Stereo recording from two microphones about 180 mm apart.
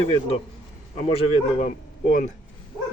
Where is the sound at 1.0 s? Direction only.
35° left (ahead or behind).